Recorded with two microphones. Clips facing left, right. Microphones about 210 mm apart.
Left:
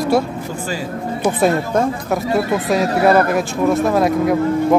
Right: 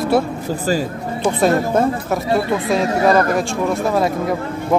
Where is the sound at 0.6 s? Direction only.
40° right (ahead or behind).